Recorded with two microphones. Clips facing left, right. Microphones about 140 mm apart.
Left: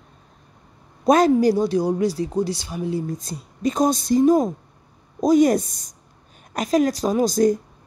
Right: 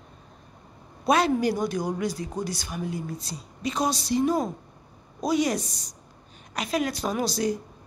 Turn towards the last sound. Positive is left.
turn(degrees=45)  # may be behind; listen again after turning